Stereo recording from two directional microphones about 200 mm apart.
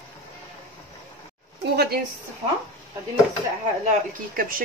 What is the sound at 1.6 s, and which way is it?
Speech, 55° right (ahead or behind).